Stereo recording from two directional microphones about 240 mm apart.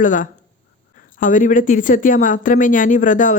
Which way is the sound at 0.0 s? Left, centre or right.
Left.